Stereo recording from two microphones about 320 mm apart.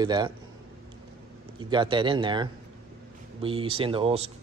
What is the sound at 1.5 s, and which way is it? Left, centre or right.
Speech, centre.